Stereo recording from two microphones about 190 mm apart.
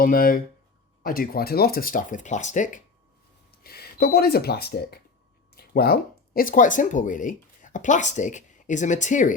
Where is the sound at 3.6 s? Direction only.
55° left (ahead or behind).